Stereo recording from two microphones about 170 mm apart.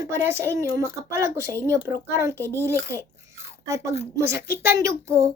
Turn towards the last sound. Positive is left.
turn(degrees=-15)  # may be behind; listen again after turning